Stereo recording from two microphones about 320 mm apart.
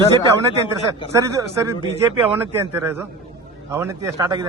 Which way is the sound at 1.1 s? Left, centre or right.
Centre.